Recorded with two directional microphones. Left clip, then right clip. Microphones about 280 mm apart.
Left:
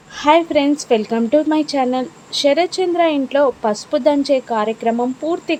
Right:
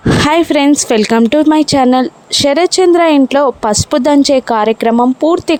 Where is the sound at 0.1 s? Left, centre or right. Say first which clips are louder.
Right 3 dB; right.